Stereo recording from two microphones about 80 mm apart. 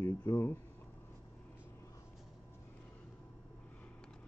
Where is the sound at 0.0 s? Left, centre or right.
Left.